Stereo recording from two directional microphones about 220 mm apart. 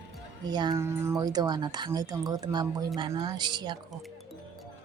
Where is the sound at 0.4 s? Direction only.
20° right (ahead or behind).